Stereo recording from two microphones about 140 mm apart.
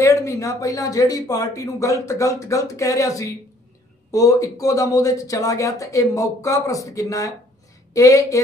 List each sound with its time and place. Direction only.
0.0 s speech: 20° left (ahead or behind)